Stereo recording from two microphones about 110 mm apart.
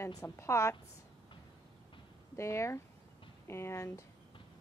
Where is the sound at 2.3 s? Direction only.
25° left (ahead or behind).